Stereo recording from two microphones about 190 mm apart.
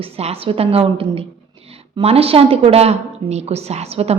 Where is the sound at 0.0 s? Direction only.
30° right (ahead or behind).